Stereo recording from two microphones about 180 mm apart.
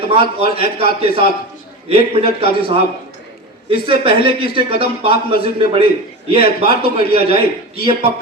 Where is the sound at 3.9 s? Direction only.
30° right (ahead or behind).